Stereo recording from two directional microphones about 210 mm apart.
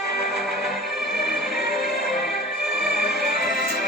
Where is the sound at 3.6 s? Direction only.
45° left (ahead or behind).